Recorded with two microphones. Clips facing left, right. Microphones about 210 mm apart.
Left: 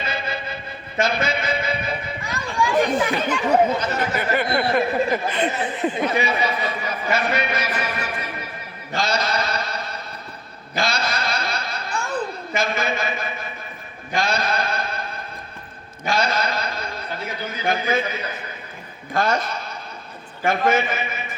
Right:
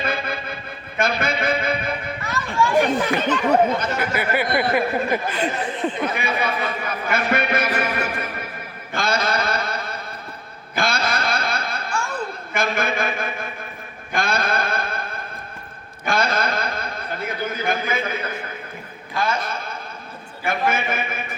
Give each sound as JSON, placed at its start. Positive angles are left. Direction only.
{"t": 0.0, "sound": "a sound", "side_deg": -55}
{"t": 2.2, "sound": "chatter", "side_deg": 15}
{"t": 3.2, "sound": "speech", "side_deg": 10}
{"t": 4.1, "sound": "speech", "side_deg": -10}
{"t": 5.5, "sound": "speech", "side_deg": 5}
{"t": 6.1, "sound": "a man's voice", "side_deg": -55}
{"t": 8.9, "sound": "mantra", "side_deg": -55}
{"t": 10.8, "sound": "a sound", "side_deg": -55}
{"t": 16.0, "sound": "a sound", "side_deg": -55}
{"t": 19.1, "sound": "a man's voice", "side_deg": 50}
{"t": 19.5, "sound": "chuckle", "side_deg": -50}
{"t": 20.5, "sound": "a man's voice", "side_deg": -55}